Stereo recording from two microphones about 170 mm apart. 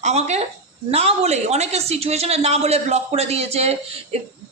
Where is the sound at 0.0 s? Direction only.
40° right (ahead or behind).